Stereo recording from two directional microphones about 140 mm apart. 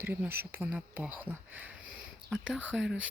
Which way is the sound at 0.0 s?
15° right (ahead or behind).